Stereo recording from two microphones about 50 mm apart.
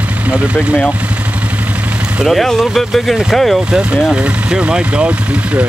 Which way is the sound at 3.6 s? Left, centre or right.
Right.